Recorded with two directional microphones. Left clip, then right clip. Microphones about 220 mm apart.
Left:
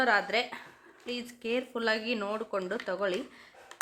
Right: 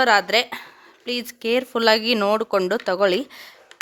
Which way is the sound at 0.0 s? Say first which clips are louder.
Right 10 dB; 50° right (ahead or behind).